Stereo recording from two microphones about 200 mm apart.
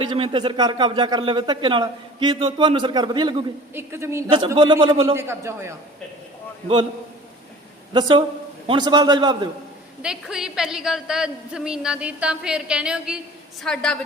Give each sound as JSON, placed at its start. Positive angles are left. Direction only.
{"t": 0.0, "sound": "a man's voice", "side_deg": -25}
{"t": 4.3, "sound": "speech", "side_deg": -25}
{"t": 5.1, "sound": "a man's voice", "side_deg": -15}
{"t": 7.9, "sound": "speech", "side_deg": -25}
{"t": 10.0, "sound": "a woman's voice", "side_deg": -5}